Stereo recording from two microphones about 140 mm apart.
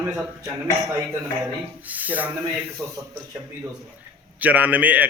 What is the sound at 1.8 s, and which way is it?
A man's voice, 10° right (ahead or behind).